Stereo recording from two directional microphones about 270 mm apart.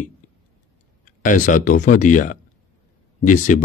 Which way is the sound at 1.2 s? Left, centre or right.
Left.